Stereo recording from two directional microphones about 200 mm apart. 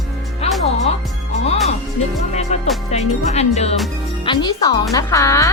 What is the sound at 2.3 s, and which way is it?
Music, 35° left (ahead or behind).